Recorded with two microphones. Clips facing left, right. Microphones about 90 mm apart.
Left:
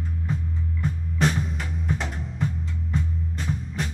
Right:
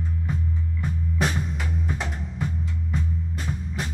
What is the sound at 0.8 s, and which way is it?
Music, 5° right (ahead or behind).